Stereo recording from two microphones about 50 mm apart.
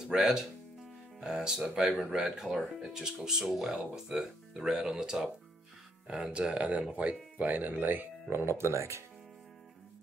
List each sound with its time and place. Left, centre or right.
0.1 s speech: centre; by 8.1 s right
8.3 s speech: right